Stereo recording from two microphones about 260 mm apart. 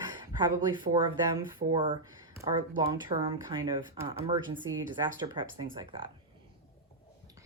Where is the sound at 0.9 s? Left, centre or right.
Right.